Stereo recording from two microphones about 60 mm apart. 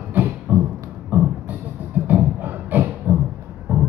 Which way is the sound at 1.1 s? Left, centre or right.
Right.